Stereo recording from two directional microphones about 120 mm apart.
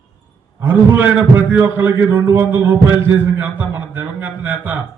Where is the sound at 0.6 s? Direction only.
15° right (ahead or behind).